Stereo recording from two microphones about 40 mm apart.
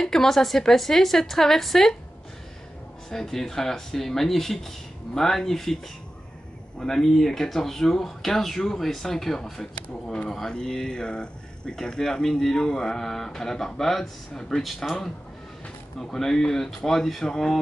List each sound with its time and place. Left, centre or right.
0.0 s speech: centre
3.1 s speech: centre
6.8 s speech: centre
10.5 s speech: centre
16.0 s speech: centre